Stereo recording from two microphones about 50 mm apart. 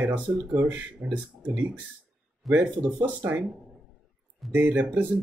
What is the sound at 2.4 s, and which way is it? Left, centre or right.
Speech, centre.